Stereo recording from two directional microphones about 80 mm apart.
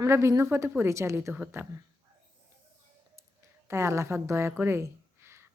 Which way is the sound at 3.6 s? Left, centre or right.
Right.